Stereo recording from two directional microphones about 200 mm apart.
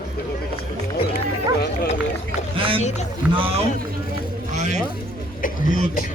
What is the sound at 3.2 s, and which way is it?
Speech, 5° right (ahead or behind).